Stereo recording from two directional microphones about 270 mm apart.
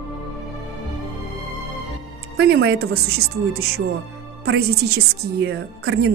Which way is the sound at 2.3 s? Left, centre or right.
Right.